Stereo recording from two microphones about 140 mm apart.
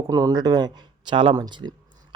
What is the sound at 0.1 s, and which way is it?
A man's voice, 25° right (ahead or behind).